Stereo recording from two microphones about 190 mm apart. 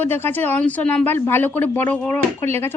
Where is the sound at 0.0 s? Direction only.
10° left (ahead or behind).